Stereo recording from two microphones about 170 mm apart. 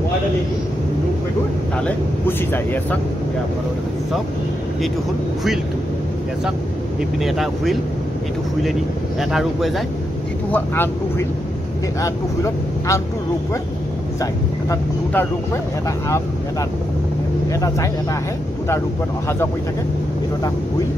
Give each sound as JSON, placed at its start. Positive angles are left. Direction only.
{"t": 1.9, "sound": "speech", "side_deg": 10}
{"t": 7.0, "sound": "speech", "side_deg": 0}
{"t": 9.2, "sound": "speech", "side_deg": 0}
{"t": 10.5, "sound": "speech", "side_deg": 15}
{"t": 14.2, "sound": "speech", "side_deg": 20}
{"t": 17.5, "sound": "speech", "side_deg": 20}